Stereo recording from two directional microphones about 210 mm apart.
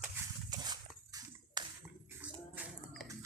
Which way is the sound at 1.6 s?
20° right (ahead or behind).